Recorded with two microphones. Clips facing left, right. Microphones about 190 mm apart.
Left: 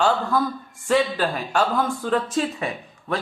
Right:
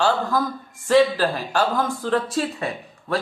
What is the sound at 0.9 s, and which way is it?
Speech, 35° right (ahead or behind).